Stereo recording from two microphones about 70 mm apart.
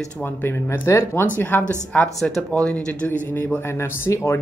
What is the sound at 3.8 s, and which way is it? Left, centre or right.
Speech, left.